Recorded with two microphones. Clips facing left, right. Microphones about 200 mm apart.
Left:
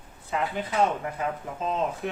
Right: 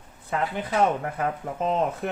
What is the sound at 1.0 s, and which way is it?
Speech, 55° right (ahead or behind).